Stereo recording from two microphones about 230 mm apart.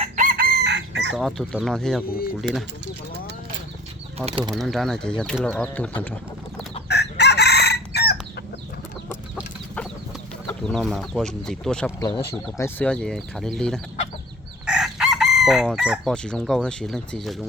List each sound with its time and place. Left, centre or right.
0.0 s chicken: right
1.1 s speech: centre
4.3 s speech: right
4.5 s speech: centre
6.8 s chicken: left
10.6 s speech: centre
11.9 s speech: centre
14.7 s chicken: centre